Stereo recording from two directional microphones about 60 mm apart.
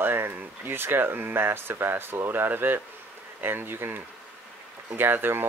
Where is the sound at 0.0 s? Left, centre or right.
Right.